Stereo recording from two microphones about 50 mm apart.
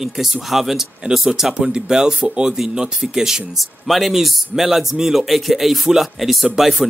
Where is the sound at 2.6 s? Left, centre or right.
Centre.